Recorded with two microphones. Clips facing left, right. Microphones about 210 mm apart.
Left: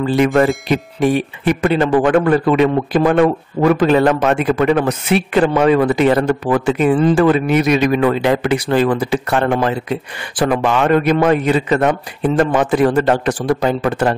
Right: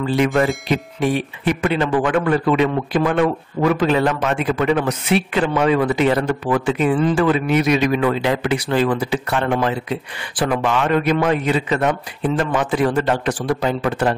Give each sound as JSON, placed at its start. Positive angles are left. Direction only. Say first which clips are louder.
{"t": 0.1, "sound": "speech", "louder": "left 4 dB", "side_deg": 45}